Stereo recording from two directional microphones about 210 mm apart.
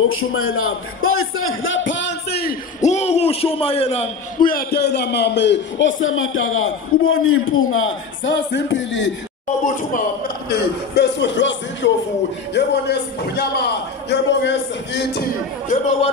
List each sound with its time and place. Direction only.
0.1 s a man's voice: 75° left (ahead or behind); by 2.5 s 50° left (ahead or behind)
2.8 s a man's voice: 30° left (ahead or behind); by 9.1 s 60° left (ahead or behind)
9.7 s a man's voice: 40° left (ahead or behind)